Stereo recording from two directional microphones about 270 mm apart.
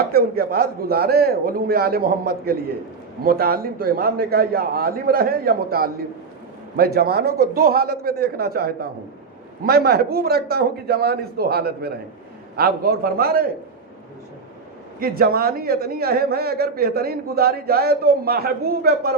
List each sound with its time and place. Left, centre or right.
0.0 s a man's voice: right
14.9 s a man's voice: right